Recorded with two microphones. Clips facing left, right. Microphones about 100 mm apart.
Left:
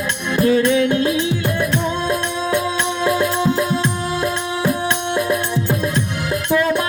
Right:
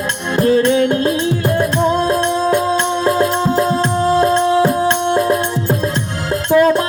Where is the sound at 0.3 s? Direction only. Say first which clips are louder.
Right 2 dB; 35° right (ahead or behind).